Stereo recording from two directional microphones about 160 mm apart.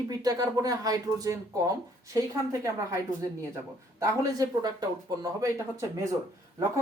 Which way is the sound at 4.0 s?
20° right (ahead or behind).